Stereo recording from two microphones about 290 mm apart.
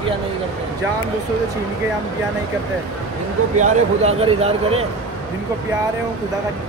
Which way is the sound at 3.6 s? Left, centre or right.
Right.